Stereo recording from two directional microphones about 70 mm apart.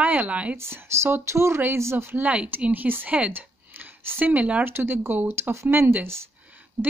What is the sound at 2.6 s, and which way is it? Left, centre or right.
Speech, right.